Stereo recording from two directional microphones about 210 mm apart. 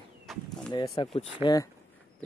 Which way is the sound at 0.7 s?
20° left (ahead or behind).